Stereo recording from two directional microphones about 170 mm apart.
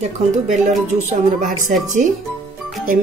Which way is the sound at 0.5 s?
45° right (ahead or behind).